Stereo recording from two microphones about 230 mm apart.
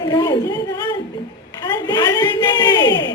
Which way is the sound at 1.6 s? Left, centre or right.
Centre.